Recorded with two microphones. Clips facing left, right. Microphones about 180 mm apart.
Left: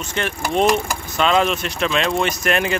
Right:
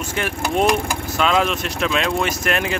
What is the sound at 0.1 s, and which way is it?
Speech, 10° right (ahead or behind).